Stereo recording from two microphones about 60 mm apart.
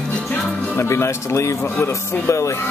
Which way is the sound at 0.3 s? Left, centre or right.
Left.